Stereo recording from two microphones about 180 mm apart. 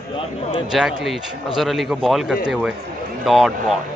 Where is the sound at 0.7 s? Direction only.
Centre (ahead or behind).